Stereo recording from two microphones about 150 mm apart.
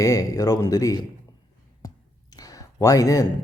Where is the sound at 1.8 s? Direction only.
25° left (ahead or behind).